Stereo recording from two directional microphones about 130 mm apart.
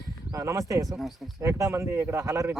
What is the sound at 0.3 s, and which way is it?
Speech, 25° right (ahead or behind).